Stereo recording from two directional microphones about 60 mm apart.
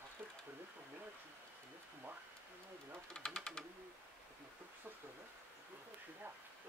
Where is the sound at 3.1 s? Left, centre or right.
Centre.